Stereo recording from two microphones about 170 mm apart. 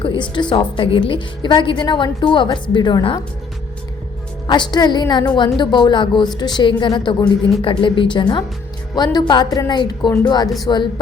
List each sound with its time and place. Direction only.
0.0 s a woman's voice: 30° left (ahead or behind)
4.4 s a woman's voice: 25° left (ahead or behind)